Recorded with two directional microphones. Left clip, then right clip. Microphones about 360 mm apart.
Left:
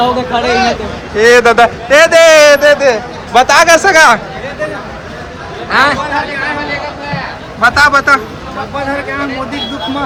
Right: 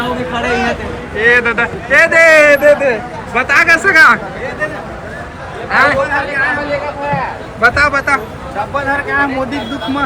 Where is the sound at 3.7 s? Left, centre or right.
Centre.